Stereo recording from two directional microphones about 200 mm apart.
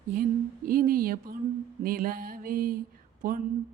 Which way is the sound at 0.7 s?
45° right (ahead or behind).